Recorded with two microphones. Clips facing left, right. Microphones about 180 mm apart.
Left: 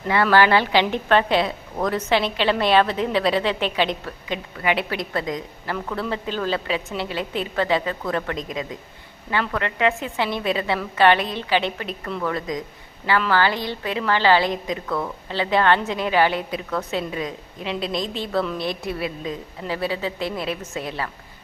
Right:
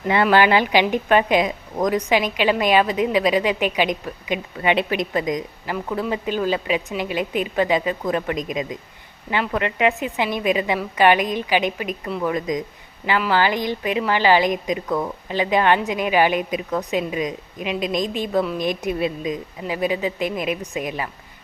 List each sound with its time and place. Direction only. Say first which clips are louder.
0.1 s a woman's voice: right 1 dB; 20° right (ahead or behind)